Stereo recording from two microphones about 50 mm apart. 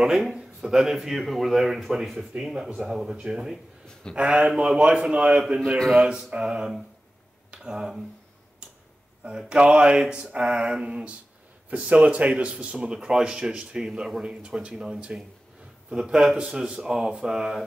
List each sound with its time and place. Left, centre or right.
0.0 s a man's voice: centre
9.5 s speech: centre
10.4 s speech: centre; by 15.3 s right
15.9 s speech: centre